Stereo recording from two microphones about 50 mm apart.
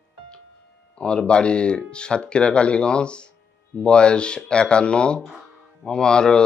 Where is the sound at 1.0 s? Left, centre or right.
Centre.